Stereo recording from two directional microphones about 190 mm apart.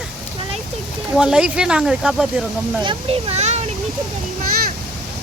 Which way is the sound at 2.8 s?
35° right (ahead or behind).